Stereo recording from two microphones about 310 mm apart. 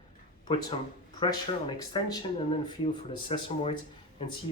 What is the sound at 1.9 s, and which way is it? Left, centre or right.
Speech, centre.